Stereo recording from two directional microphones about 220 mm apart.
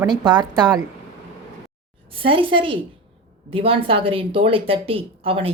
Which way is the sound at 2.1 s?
25° right (ahead or behind).